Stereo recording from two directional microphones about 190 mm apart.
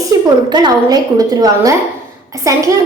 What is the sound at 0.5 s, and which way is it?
Speech, 20° right (ahead or behind).